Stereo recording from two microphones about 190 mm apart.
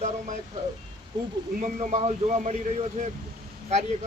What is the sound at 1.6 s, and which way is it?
A man's voice, 40° right (ahead or behind).